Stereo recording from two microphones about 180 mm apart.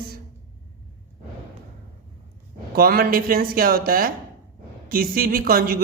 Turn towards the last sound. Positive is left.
turn(degrees=-55)  # may be behind; listen again after turning